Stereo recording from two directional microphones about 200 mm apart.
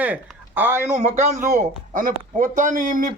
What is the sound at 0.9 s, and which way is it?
Speech, 35° right (ahead or behind).